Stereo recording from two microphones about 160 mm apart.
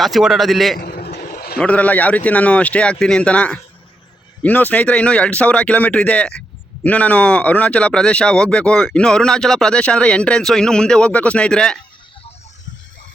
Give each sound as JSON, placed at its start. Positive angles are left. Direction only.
{"t": 0.0, "sound": "speech", "side_deg": 0}
{"t": 0.8, "sound": "vehicle", "side_deg": 75}
{"t": 1.5, "sound": "a man's voice", "side_deg": 10}